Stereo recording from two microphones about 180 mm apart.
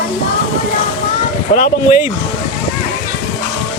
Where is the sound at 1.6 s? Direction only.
35° left (ahead or behind).